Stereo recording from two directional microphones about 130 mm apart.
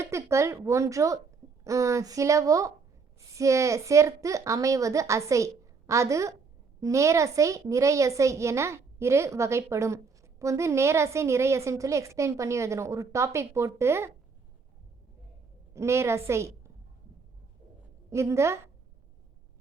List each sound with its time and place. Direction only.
0.0 s a woman's voice: 20° right (ahead or behind)
15.7 s a woman's voice: 20° right (ahead or behind)
18.1 s a woman's voice: 20° right (ahead or behind)